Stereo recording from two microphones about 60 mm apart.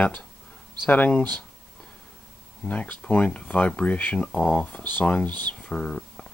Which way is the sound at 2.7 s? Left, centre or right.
Left.